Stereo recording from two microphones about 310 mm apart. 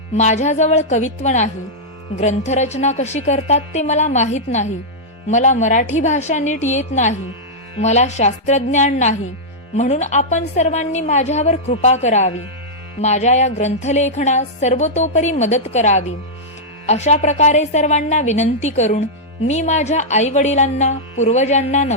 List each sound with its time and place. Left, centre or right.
0.1 s a woman's voice: left